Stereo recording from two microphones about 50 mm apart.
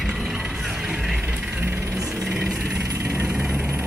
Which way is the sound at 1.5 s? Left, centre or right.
Right.